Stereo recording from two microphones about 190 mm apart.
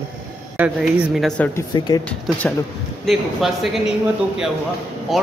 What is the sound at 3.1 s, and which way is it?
Speech, centre (ahead or behind).